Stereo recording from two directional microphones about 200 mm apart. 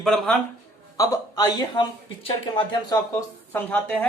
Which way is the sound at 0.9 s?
20° left (ahead or behind).